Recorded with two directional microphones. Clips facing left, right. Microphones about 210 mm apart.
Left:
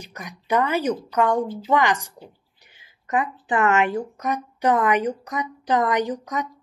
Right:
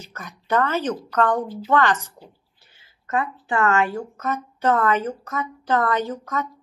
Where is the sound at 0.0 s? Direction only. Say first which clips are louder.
Left 1 dB; 15° left (ahead or behind).